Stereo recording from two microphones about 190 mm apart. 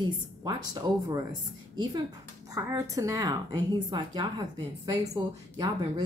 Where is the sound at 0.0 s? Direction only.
25° right (ahead or behind).